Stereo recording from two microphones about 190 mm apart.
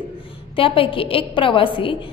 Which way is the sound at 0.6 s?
30° left (ahead or behind).